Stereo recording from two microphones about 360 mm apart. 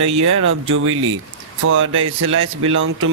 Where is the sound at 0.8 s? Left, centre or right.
Right.